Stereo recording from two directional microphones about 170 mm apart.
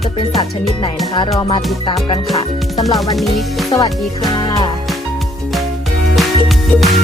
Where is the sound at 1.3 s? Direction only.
35° left (ahead or behind).